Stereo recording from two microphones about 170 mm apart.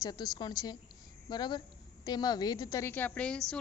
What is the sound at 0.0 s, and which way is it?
A woman's voice, 25° left (ahead or behind).